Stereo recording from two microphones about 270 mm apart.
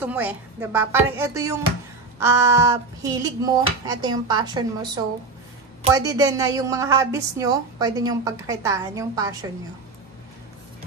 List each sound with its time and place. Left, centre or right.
0.0 s a woman's voice: centre